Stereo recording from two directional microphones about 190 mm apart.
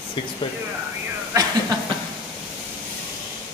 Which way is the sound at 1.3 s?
20° right (ahead or behind).